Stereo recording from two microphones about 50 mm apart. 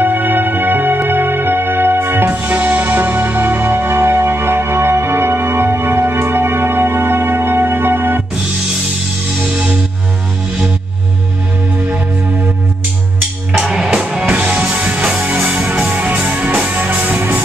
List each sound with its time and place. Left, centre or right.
0.0 s music: right
2.3 s music: right
9.5 s music: right
13.6 s music: centre
14.2 s music: right
15.8 s music: right